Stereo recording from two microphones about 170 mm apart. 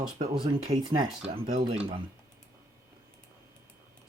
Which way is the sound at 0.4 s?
35° right (ahead or behind).